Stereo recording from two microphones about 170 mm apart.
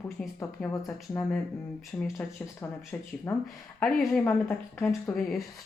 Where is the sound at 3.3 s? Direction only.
15° left (ahead or behind).